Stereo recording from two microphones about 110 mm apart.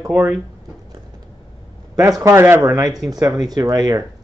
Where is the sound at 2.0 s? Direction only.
35° right (ahead or behind).